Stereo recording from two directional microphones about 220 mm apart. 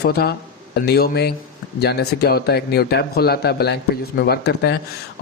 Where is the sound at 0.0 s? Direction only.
45° left (ahead or behind).